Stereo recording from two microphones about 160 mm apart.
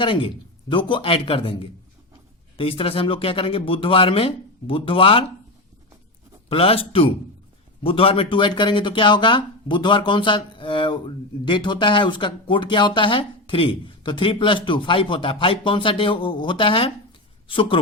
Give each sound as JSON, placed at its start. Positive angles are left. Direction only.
{"t": 0.0, "sound": "speech", "side_deg": 30}
{"t": 6.5, "sound": "speech", "side_deg": 35}